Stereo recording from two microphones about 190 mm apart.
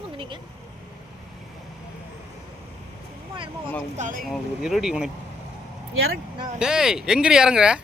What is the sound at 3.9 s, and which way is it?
Speech, 40° right (ahead or behind).